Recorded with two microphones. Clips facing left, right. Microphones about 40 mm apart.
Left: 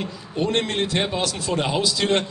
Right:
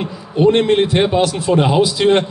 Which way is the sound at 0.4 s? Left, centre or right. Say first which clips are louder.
Right 10 dB; centre.